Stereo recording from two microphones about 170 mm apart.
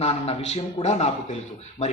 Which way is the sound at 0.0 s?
40° left (ahead or behind).